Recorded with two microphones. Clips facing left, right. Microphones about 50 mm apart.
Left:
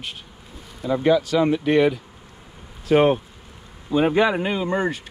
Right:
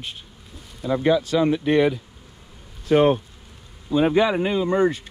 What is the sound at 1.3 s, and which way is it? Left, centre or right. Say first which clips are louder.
Speech: left 1 dB; left.